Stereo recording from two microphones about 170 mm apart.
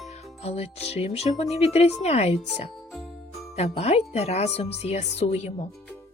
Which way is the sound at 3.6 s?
40° left (ahead or behind).